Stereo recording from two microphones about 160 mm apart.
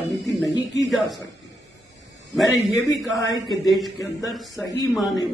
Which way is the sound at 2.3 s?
Centre (ahead or behind).